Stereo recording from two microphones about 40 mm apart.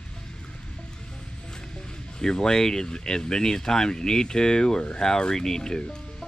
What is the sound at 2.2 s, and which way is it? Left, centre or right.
Speech, centre.